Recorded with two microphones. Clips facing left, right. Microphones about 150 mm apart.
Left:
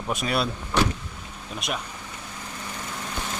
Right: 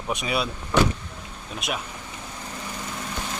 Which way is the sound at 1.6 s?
Centre (ahead or behind).